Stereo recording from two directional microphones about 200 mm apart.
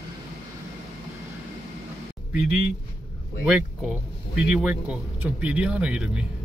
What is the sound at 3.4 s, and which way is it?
Speech, 5° right (ahead or behind).